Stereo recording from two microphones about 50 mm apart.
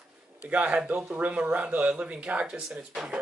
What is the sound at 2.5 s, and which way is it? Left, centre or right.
Speech, centre.